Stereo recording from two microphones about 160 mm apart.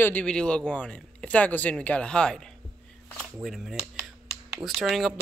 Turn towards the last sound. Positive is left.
turn(degrees=0)  # may be behind; listen again after turning